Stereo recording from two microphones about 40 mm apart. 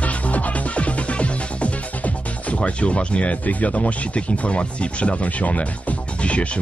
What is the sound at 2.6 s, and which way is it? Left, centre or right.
Speech, left.